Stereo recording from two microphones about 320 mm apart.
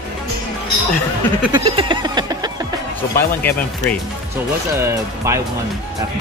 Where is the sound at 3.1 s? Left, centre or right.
Centre.